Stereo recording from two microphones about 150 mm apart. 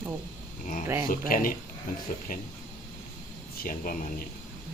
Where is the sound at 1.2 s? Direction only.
70° left (ahead or behind).